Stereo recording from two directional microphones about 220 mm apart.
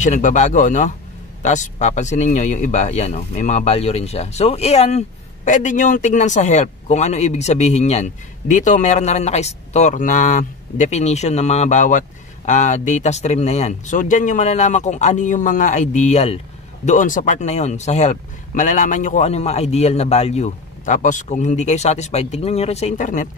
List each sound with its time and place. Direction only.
0.0 s speech: 35° left (ahead or behind)